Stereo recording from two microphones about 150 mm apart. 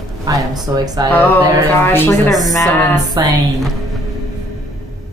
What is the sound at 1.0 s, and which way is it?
Speech, 15° left (ahead or behind).